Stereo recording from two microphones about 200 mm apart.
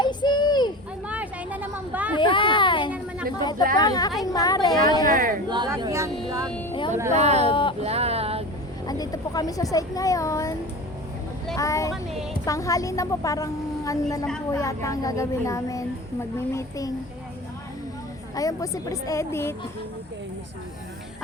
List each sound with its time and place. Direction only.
0.0 s a sound: 20° left (ahead or behind)
1.0 s vehicle: 5° right (ahead or behind)
2.1 s a sound: 25° left (ahead or behind)
3.8 s a woman's voice: 20° left (ahead or behind)
5.1 s speech: 45° right (ahead or behind)
5.5 s speech: 20° right (ahead or behind)
6.5 s vehicle: 10° left (ahead or behind)
7.1 s speech: 35° right (ahead or behind)
7.4 s speech: 25° left (ahead or behind)
7.8 s music: 30° right (ahead or behind)
8.9 s speech: 20° left (ahead or behind)
11.5 s a woman's voice: 15° left (ahead or behind)
18.3 s a woman's voice: 15° left (ahead or behind)